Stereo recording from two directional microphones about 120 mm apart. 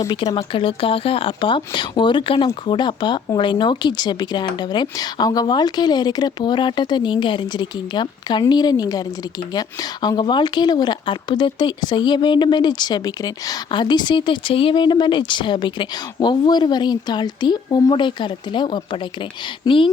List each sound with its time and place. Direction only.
0.1 s speech: 40° left (ahead or behind)